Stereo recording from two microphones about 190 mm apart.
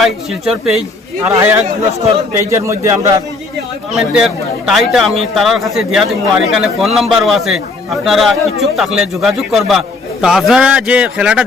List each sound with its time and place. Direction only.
0.0 s a man's voice: centre (ahead or behind)
1.3 s a man's voice: 15° right (ahead or behind)
3.9 s a man's voice: centre (ahead or behind)